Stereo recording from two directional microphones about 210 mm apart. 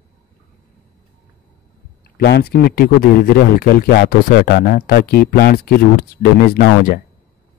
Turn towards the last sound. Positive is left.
turn(degrees=45)  # may be behind; listen again after turning